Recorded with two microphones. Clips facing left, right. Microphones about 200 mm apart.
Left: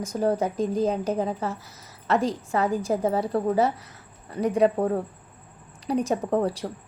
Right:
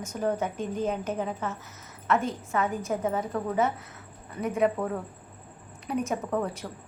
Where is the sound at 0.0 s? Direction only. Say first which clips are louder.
Left 4 dB; 35° left (ahead or behind).